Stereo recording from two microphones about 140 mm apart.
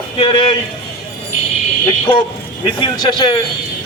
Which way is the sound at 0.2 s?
35° left (ahead or behind).